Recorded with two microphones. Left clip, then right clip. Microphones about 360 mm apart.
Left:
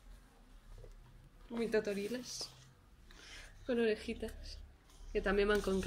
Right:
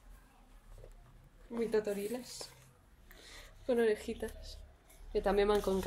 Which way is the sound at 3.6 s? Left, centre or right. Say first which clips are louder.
Right 3 dB; centre.